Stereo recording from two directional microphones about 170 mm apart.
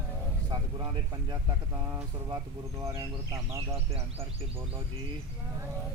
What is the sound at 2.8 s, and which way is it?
Speech, 15° right (ahead or behind).